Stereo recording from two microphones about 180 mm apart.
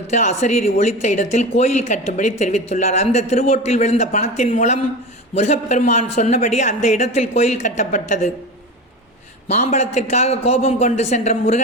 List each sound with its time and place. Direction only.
0.1 s speech: 40° left (ahead or behind)
9.5 s speech: 40° left (ahead or behind)